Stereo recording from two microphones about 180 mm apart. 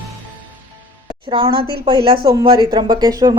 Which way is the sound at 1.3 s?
25° right (ahead or behind).